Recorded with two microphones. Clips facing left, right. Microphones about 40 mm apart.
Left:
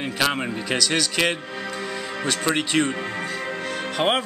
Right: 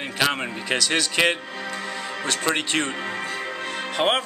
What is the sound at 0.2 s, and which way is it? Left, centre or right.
A man's voice, centre.